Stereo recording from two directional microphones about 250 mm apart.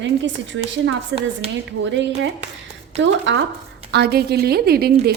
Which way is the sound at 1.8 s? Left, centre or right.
Right.